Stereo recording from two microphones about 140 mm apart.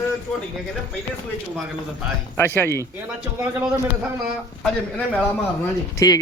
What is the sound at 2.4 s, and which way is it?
Speech, 15° left (ahead or behind).